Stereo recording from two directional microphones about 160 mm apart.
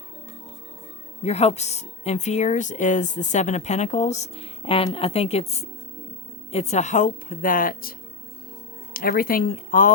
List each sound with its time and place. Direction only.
1.2 s speech: 40° left (ahead or behind); by 9.9 s 60° left (ahead or behind)